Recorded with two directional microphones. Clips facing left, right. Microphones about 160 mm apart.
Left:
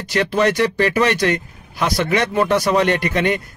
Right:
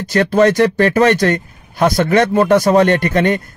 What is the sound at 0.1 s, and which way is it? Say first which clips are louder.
Speech: right 5 dB; 45° right (ahead or behind).